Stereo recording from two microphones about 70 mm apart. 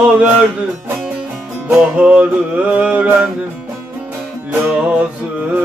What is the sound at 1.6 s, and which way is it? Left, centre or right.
Music, centre.